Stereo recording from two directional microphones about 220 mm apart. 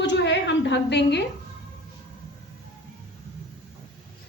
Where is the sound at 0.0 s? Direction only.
55° left (ahead or behind).